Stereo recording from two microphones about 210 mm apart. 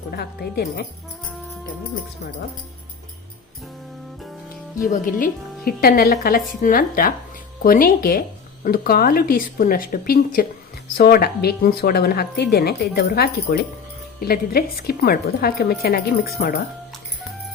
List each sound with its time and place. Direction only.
0.1 s a woman's voice: 45° left (ahead or behind)
4.8 s a woman's voice: 40° left (ahead or behind)